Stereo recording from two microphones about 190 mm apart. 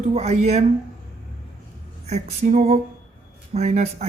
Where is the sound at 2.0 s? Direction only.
35° right (ahead or behind).